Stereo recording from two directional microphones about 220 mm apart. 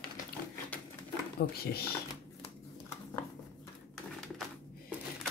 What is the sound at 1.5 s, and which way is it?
Speech, 45° left (ahead or behind).